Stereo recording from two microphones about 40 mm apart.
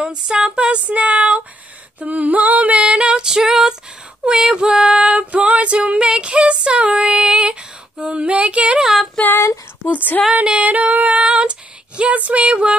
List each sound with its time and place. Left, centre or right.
0.0 s female singing: right
3.3 s female singing: centre
4.8 s female singing: right
7.0 s child singing: centre
8.0 s female singing: right
8.8 s female singing: centre
9.8 s a sound: left
10.6 s female singing: right